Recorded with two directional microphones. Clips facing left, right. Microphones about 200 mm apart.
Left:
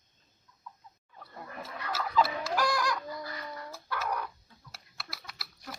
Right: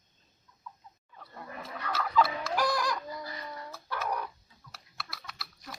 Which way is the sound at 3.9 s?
10° right (ahead or behind).